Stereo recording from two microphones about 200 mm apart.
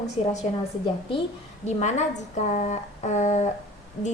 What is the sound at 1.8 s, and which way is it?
A woman's voice, 35° left (ahead or behind).